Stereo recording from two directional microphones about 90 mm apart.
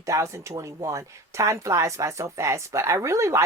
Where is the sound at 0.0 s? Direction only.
35° right (ahead or behind).